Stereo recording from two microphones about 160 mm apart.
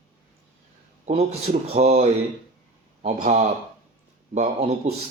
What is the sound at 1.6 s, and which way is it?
A man's voice, 40° right (ahead or behind).